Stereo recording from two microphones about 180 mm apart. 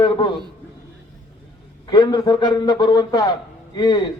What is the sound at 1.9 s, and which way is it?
A man's voice, 25° left (ahead or behind).